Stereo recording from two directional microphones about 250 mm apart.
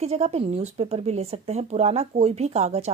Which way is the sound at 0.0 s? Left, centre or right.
Right.